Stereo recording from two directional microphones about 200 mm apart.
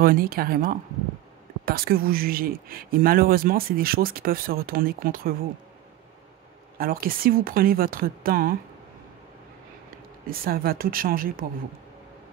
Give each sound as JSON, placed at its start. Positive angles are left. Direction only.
{"t": 0.0, "sound": "speech", "side_deg": -45}
{"t": 6.8, "sound": "speech", "side_deg": -45}
{"t": 10.4, "sound": "speech", "side_deg": -45}